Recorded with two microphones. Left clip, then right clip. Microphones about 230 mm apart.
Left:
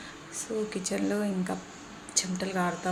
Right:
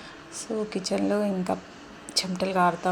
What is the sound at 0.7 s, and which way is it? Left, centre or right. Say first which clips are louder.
A woman's voice: right 4 dB; centre.